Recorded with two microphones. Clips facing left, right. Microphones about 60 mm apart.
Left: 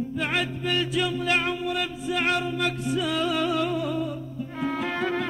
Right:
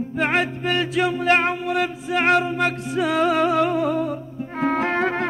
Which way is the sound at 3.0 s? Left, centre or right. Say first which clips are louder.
Right 8 dB; right.